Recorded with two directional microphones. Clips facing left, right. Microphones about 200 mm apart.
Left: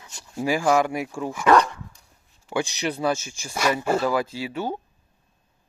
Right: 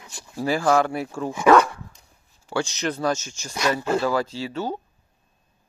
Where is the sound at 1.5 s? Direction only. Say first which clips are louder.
Right 2 dB; 5° right (ahead or behind).